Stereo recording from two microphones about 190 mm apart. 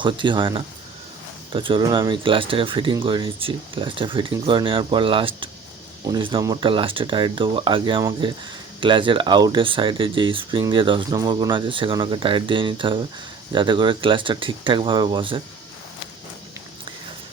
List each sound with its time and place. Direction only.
0.0 s speech: 25° right (ahead or behind)